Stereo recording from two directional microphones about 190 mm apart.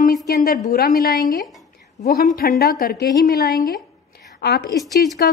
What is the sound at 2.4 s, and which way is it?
A woman's voice, 55° left (ahead or behind).